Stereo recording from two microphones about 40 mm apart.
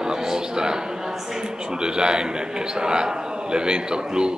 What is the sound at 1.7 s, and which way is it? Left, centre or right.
A man's voice, centre.